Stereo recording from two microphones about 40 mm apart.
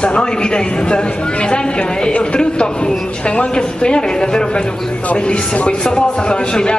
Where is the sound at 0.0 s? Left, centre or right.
Left.